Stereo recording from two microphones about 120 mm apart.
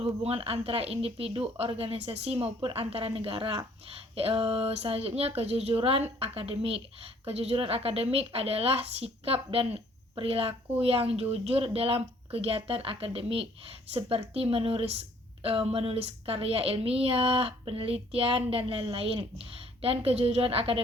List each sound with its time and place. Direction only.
0.0 s a woman's voice: 55° right (ahead or behind)